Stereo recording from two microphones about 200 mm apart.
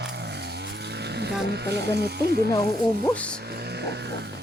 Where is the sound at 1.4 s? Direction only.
55° right (ahead or behind).